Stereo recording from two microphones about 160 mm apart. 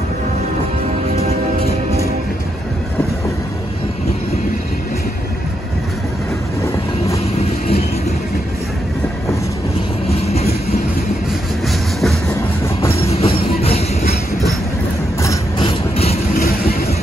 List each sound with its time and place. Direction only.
10.2 s train: 40° left (ahead or behind)
11.6 s train: centre (ahead or behind)
13.1 s music: 40° left (ahead or behind)
15.6 s vehicle: 40° left (ahead or behind)